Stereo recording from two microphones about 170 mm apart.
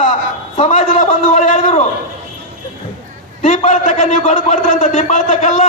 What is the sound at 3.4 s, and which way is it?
A man's voice, 40° left (ahead or behind).